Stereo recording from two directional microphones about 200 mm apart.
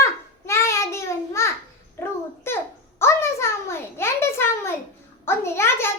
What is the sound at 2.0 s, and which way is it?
Babbling, 15° left (ahead or behind).